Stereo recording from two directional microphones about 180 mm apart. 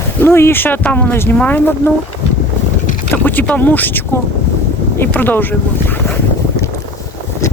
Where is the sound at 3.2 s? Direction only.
10° left (ahead or behind).